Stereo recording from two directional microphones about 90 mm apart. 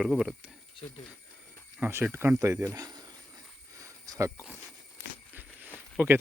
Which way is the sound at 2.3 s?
40° right (ahead or behind).